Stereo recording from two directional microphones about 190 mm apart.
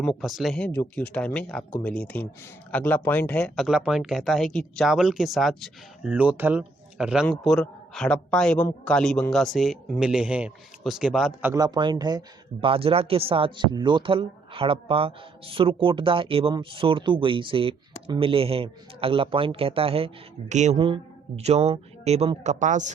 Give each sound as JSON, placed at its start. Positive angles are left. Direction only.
{"t": 0.0, "sound": "speech", "side_deg": 0}
{"t": 11.5, "sound": "speech", "side_deg": -20}